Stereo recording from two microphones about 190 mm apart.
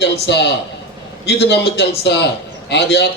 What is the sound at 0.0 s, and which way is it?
A man's voice, 65° left (ahead or behind).